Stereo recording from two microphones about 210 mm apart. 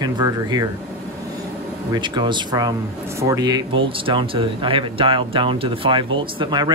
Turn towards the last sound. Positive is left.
turn(degrees=-20)  # may be behind; listen again after turning